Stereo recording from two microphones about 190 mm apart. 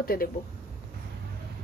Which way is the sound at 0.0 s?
50° left (ahead or behind).